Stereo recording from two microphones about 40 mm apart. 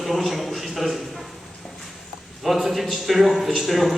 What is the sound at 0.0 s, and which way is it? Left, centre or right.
A man's voice, centre.